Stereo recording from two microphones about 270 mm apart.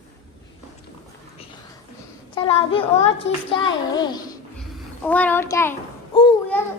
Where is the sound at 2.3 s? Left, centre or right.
Left.